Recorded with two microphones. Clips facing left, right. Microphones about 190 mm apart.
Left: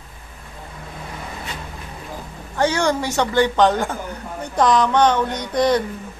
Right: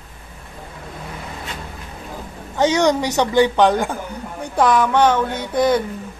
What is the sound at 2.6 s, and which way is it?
A woman's voice, 20° right (ahead or behind).